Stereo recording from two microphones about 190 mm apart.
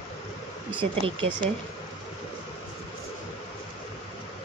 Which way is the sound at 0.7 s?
30° right (ahead or behind).